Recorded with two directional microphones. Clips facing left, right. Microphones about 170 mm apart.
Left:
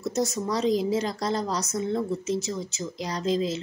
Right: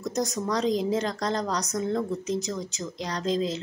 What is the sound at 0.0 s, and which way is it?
Speech, 5° left (ahead or behind).